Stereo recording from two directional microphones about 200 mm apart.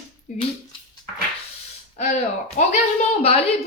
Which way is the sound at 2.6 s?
35° left (ahead or behind).